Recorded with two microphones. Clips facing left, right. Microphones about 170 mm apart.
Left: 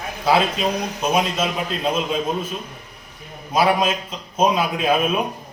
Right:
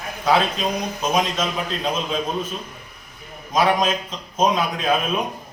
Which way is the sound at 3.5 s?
5° left (ahead or behind).